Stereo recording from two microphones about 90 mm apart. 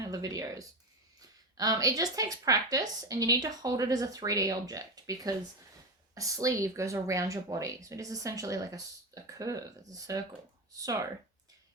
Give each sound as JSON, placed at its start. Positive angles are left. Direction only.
{"t": 0.0, "sound": "a woman's voice", "side_deg": -40}